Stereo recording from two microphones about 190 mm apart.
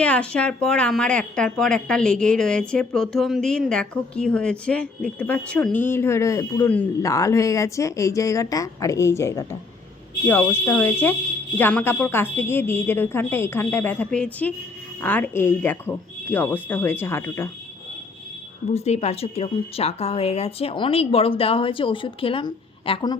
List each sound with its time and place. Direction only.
0.0 s speech: 5° left (ahead or behind)
18.7 s speech: 35° left (ahead or behind)